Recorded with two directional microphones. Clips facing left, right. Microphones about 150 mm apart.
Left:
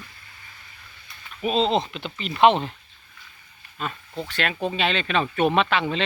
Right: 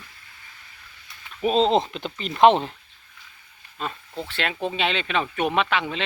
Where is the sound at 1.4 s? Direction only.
40° right (ahead or behind).